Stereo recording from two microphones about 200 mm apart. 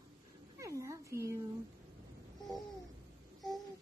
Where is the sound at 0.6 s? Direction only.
15° right (ahead or behind).